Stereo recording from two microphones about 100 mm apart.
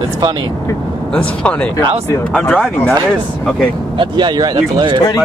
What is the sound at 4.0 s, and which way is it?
Speech, 50° right (ahead or behind).